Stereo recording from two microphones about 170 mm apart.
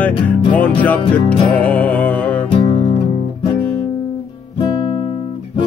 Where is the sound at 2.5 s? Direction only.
30° left (ahead or behind).